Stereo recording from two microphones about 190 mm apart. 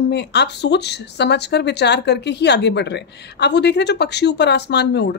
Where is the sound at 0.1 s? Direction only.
65° left (ahead or behind).